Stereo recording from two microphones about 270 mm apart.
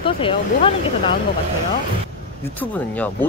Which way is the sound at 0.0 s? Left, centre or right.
Centre.